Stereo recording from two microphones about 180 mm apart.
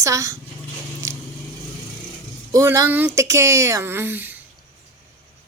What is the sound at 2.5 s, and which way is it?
Speech, 20° right (ahead or behind).